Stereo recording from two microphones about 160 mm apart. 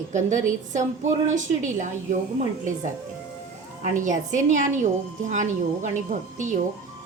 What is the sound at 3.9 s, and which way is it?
Speech, 50° right (ahead or behind).